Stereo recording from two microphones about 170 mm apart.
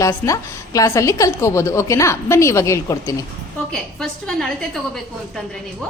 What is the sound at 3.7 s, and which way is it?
A woman's voice, centre (ahead or behind).